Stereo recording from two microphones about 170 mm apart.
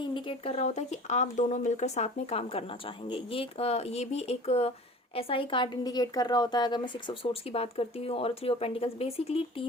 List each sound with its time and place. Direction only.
0.1 s speech: 30° left (ahead or behind)